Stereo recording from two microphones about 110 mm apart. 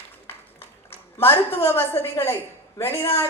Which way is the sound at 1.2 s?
25° left (ahead or behind).